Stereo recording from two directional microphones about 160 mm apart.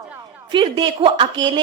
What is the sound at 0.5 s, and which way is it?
Speech, 30° right (ahead or behind).